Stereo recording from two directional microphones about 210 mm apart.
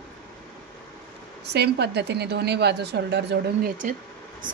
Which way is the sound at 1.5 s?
50° right (ahead or behind).